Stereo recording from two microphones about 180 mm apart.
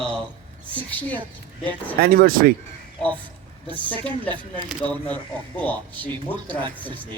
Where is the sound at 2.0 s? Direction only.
55° right (ahead or behind).